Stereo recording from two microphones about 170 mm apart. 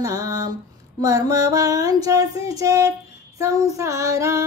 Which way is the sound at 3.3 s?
20° right (ahead or behind).